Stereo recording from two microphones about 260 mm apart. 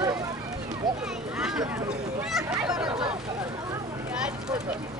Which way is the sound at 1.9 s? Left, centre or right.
Centre.